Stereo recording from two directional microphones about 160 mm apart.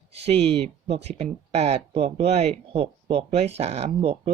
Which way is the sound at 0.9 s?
40° right (ahead or behind).